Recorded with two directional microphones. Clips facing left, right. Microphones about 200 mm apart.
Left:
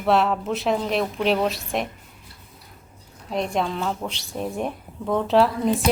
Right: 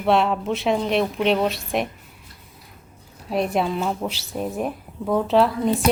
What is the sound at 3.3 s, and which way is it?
Speech, 5° right (ahead or behind).